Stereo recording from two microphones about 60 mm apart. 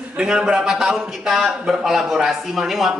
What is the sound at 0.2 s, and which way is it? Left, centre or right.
A man's voice, centre.